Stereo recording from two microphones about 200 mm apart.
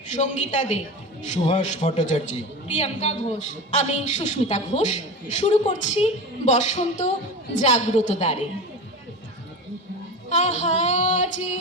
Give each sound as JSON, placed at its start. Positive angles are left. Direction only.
{"t": 0.1, "sound": "a woman's voice", "side_deg": 35}
{"t": 10.2, "sound": "a woman's voice", "side_deg": 35}